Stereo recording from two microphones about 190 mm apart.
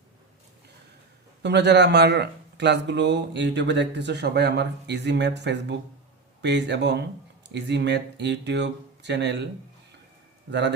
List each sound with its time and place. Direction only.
1.4 s speech: 65° right (ahead or behind)
10.5 s speech: 65° right (ahead or behind)